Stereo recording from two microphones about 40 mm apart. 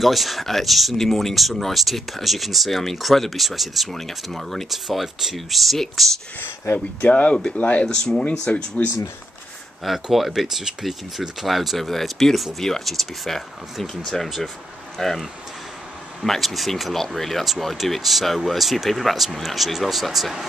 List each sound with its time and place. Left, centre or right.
0.0 s speech: centre
6.4 s speech: left
7.0 s speech: left
7.8 s speech: centre
8.3 s speech: left
9.8 s speech: centre
16.3 s speech: centre